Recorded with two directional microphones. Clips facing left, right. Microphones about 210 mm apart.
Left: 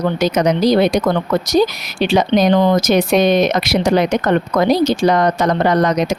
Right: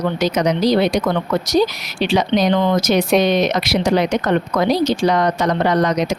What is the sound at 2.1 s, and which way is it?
Speech, 50° left (ahead or behind).